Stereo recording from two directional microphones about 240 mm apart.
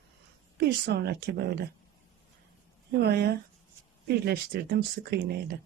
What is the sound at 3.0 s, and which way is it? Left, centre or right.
Speech, right.